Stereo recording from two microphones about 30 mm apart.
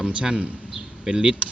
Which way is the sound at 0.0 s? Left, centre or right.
Right.